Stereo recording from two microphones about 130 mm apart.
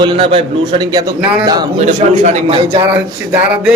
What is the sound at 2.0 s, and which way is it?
Speech, 60° right (ahead or behind).